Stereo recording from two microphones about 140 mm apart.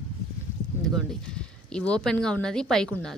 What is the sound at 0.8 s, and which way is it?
Speech, 5° left (ahead or behind).